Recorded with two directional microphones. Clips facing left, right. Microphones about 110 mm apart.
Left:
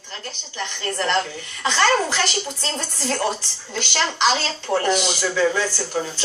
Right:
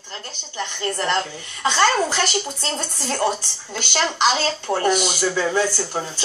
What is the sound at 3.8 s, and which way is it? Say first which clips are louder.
Speech: right 1 dB; 15° right (ahead or behind).